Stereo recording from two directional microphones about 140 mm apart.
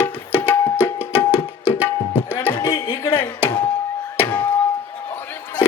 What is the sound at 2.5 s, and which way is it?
Music, 30° left (ahead or behind).